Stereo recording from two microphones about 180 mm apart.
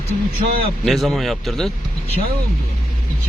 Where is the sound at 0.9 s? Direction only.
Centre (ahead or behind).